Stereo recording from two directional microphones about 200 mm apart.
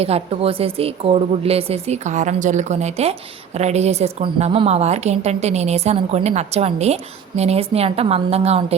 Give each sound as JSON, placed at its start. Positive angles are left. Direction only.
{"t": 0.0, "sound": "a woman's voice", "side_deg": -30}